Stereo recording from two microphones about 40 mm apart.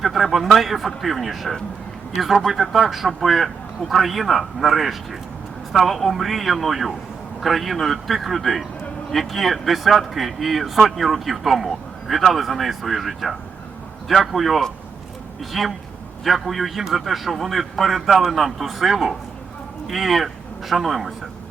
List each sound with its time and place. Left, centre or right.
0.0 s speech: centre